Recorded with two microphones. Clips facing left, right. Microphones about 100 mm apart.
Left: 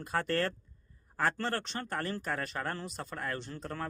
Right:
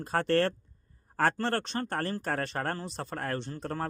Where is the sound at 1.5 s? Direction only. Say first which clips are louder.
Right 4 dB; 55° right (ahead or behind).